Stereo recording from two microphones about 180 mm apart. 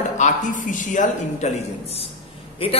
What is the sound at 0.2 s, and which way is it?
A man's voice, 45° left (ahead or behind).